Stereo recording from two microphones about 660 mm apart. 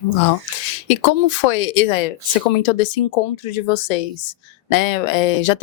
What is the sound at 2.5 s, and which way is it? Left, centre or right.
Speech, left.